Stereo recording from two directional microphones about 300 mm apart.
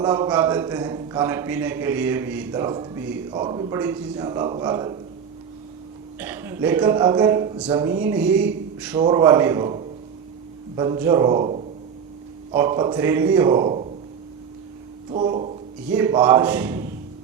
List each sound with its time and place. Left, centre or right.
0.0 s a man's voice: centre
6.1 s a man's voice: centre
15.1 s a man's voice: centre